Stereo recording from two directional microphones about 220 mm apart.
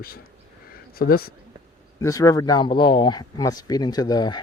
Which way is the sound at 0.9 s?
45° left (ahead or behind).